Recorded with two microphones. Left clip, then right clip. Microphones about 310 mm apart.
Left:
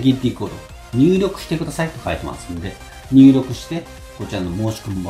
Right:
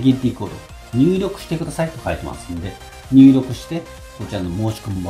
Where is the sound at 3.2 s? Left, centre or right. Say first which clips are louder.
Even; centre.